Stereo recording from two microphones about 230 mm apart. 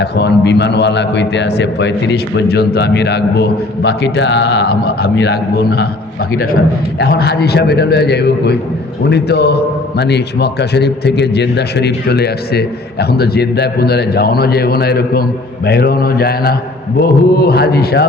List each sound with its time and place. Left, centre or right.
0.0 s a man's voice: left
7.0 s a man's voice: left
15.6 s mantra: left
17.0 s a man's voice: left